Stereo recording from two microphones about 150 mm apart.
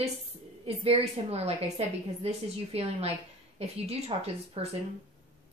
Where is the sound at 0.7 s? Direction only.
40° right (ahead or behind).